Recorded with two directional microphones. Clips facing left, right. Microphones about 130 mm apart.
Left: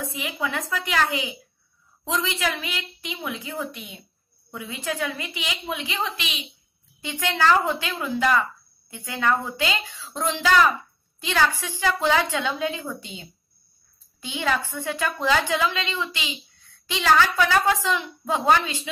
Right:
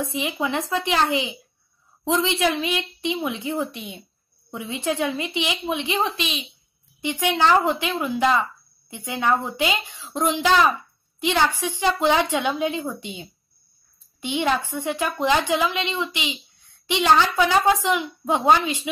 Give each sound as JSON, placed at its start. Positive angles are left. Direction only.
{"t": 0.0, "sound": "a woman's voice", "side_deg": -25}
{"t": 7.0, "sound": "a woman's voice", "side_deg": -15}